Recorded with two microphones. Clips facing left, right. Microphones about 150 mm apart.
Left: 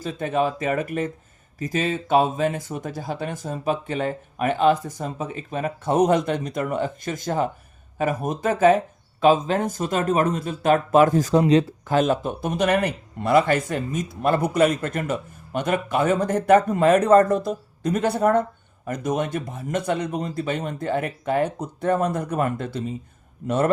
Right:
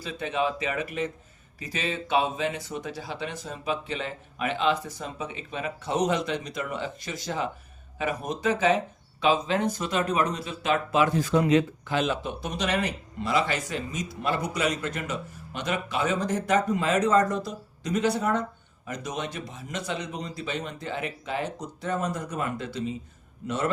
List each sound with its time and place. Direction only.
0.0 s speech: 45° left (ahead or behind)